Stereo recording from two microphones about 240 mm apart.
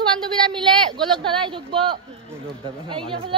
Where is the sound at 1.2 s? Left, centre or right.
Right.